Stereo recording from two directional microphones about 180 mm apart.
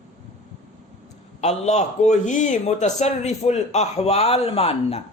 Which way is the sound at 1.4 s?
40° left (ahead or behind).